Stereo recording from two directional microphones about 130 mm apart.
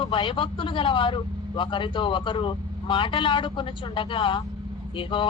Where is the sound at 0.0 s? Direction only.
40° left (ahead or behind).